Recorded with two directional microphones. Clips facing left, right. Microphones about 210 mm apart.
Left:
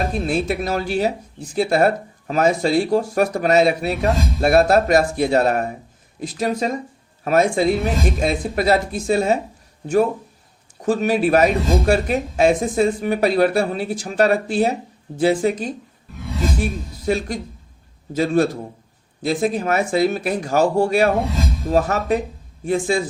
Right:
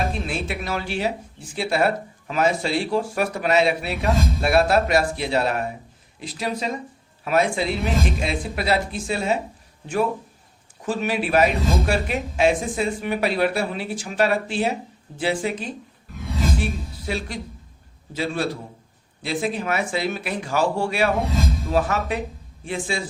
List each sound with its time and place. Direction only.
0.1 s speech: 40° left (ahead or behind)
17.1 s speech: 45° left (ahead or behind)